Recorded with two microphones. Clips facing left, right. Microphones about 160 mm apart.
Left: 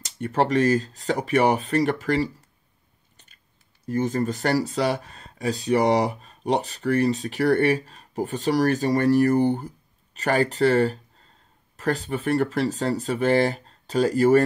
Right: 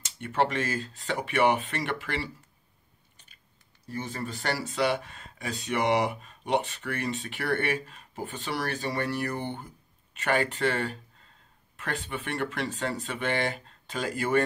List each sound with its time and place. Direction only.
0.0 s speech: 40° left (ahead or behind)
3.8 s speech: 45° left (ahead or behind)